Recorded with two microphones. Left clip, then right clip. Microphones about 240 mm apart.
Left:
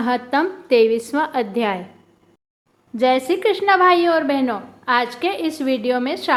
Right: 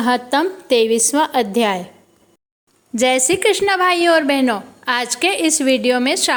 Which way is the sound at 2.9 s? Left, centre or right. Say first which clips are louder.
Right 2 dB; right.